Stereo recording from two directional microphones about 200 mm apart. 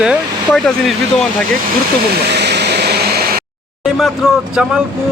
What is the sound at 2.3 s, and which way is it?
Vehicle, 55° right (ahead or behind).